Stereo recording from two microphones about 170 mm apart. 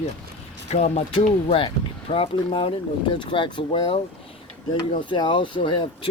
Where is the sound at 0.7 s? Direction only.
40° left (ahead or behind).